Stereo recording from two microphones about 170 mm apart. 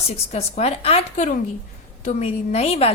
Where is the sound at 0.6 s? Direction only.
35° left (ahead or behind).